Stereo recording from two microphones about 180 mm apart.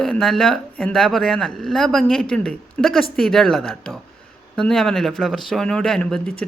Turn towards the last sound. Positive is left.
turn(degrees=5)  # may be behind; listen again after turning